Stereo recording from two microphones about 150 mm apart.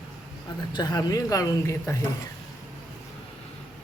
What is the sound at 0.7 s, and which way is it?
Speech, 25° left (ahead or behind).